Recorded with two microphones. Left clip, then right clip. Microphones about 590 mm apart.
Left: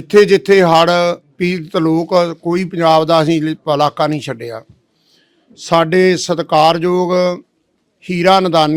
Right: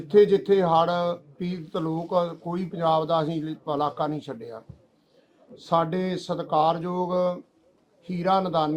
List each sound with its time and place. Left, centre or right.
0.1 s speech: left